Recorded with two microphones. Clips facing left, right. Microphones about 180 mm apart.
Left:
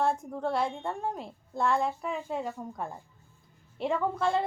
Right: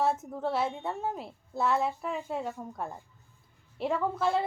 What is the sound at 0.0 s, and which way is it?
A woman's voice, 5° right (ahead or behind).